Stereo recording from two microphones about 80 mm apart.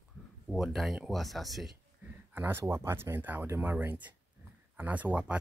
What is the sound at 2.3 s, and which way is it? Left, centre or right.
Speech, right.